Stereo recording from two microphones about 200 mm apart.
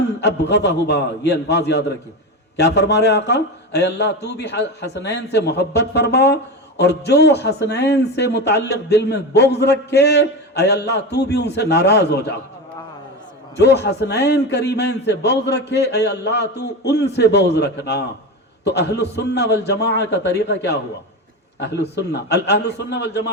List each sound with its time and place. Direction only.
0.2 s a man's voice: 60° left (ahead or behind)
13.6 s a man's voice: 55° left (ahead or behind)